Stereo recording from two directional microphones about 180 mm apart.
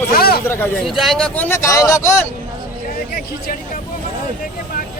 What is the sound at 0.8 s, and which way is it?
Speech, centre (ahead or behind).